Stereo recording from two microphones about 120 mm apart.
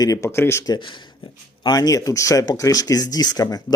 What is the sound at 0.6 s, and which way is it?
Speech, 40° left (ahead or behind).